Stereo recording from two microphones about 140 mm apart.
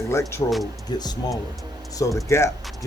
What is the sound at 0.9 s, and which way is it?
Speech, 30° left (ahead or behind).